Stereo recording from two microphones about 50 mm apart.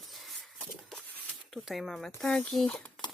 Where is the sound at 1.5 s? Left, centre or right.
Centre.